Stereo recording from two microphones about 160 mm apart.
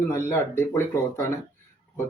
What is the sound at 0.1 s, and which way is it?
Speech, 15° left (ahead or behind).